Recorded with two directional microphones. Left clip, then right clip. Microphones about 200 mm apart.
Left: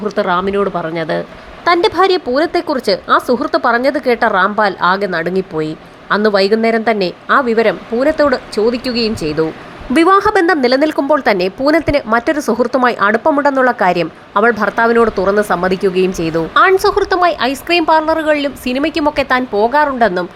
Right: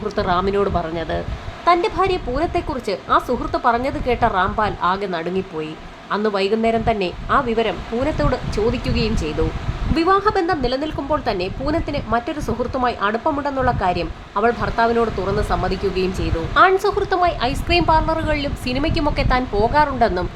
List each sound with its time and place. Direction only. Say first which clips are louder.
0.2 s a woman's voice: left 4 dB; 15° left (ahead or behind)
9.9 s a woman's voice: left 7 dB; 30° left (ahead or behind)